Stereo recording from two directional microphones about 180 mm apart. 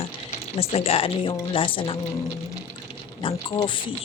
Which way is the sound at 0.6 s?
35° left (ahead or behind).